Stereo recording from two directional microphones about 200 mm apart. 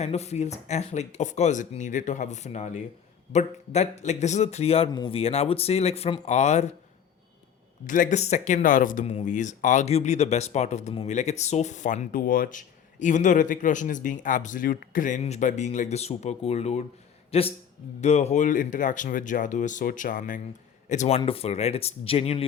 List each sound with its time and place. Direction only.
0.0 s speech: 30° left (ahead or behind)
7.9 s speech: 40° left (ahead or behind)